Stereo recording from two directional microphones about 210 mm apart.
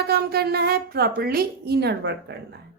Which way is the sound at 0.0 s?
50° right (ahead or behind).